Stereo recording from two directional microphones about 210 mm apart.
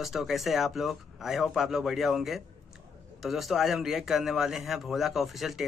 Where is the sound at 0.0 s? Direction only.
Centre (ahead or behind).